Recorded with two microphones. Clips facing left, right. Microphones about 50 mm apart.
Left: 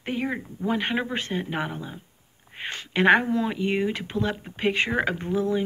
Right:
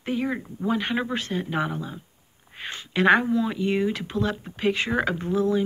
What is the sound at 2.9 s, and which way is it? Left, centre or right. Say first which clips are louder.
Speech: even; left.